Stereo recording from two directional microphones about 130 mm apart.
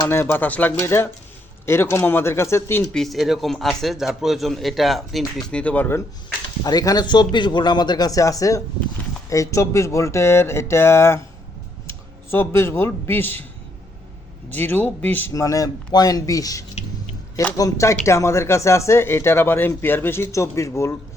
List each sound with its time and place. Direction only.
0.1 s speech: 15° left (ahead or behind)
2.8 s a man's voice: centre (ahead or behind)
6.6 s speech: 30° left (ahead or behind)
14.5 s speech: 15° left (ahead or behind)